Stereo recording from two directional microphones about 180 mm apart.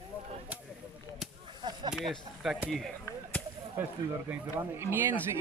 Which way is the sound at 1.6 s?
25° right (ahead or behind).